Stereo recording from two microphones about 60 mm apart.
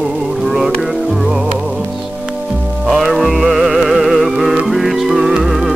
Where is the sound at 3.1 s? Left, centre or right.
Centre.